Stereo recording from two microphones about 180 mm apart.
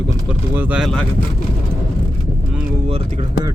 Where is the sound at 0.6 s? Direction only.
5° right (ahead or behind).